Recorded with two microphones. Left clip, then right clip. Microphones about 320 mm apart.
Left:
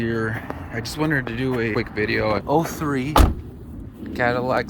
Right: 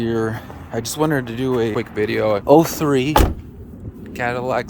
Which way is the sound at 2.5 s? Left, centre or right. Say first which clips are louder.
Right 8 dB; right.